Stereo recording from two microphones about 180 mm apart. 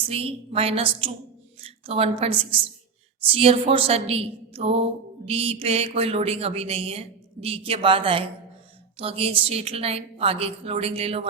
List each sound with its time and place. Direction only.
0.1 s a woman's voice: 35° right (ahead or behind)